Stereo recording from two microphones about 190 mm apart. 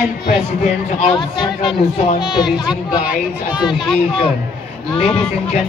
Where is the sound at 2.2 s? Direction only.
5° right (ahead or behind).